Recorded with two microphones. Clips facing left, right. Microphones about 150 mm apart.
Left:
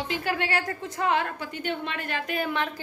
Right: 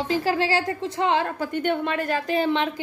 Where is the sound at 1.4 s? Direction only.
55° right (ahead or behind); by 2.8 s 20° right (ahead or behind).